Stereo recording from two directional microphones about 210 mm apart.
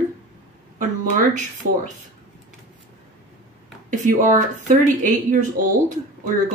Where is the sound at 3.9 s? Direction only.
35° right (ahead or behind).